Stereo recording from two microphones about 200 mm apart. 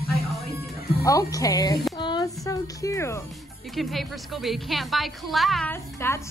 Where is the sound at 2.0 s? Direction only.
20° left (ahead or behind).